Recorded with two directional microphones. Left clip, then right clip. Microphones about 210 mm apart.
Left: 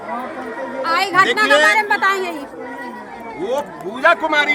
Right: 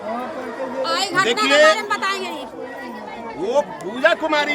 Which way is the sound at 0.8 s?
35° left (ahead or behind).